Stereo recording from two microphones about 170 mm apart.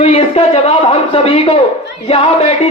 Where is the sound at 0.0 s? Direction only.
35° left (ahead or behind).